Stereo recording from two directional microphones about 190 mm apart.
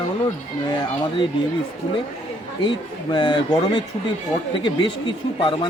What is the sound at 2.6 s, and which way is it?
Speech, 25° left (ahead or behind).